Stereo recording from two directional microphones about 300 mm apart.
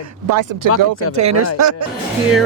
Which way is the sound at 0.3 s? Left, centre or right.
Right.